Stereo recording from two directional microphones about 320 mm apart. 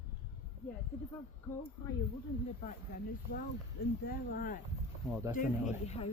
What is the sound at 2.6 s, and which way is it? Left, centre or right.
Speech, left.